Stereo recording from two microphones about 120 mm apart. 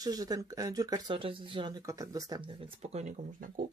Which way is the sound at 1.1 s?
45° right (ahead or behind).